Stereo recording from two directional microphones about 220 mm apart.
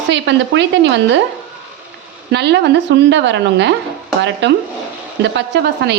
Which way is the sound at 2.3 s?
50° right (ahead or behind).